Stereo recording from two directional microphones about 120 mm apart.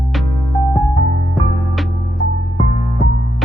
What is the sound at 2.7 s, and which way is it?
Music, 45° left (ahead or behind).